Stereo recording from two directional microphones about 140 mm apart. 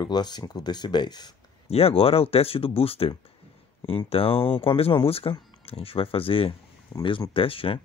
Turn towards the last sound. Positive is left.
turn(degrees=40)  # may be behind; listen again after turning